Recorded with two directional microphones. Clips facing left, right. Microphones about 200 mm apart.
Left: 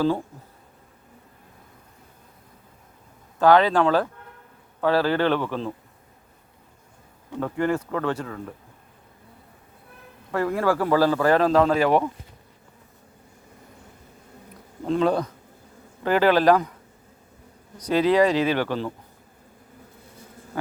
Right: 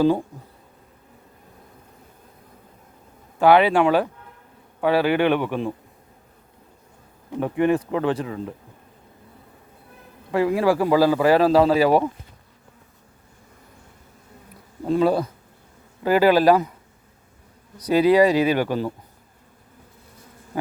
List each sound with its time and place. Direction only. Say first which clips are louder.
0.0 s speech: right 4 dB; 15° right (ahead or behind)
3.3 s speech: right 2 dB; 15° right (ahead or behind)
7.3 s speech: right 4 dB; 15° right (ahead or behind)
10.3 s speech: right 3 dB; 15° right (ahead or behind)
14.8 s speech: right 2 dB; 5° right (ahead or behind)
17.8 s speech: right 3 dB; 10° right (ahead or behind)